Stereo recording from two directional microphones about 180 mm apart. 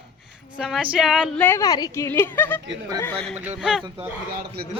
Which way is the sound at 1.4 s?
15° left (ahead or behind).